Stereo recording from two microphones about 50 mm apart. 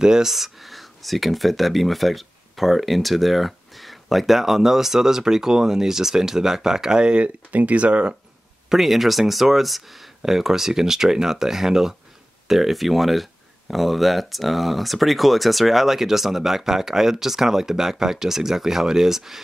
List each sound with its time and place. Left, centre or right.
0.0 s speech: centre
8.6 s speech: centre